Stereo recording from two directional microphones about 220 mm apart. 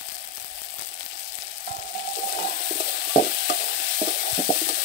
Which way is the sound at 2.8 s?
45° left (ahead or behind).